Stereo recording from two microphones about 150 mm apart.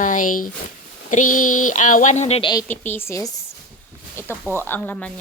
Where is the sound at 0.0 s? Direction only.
60° left (ahead or behind).